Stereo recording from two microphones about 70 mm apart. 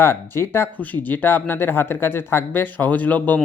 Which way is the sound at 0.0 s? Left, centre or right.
Left.